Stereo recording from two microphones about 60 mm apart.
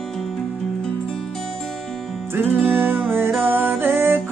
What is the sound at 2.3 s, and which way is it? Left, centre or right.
Music, right.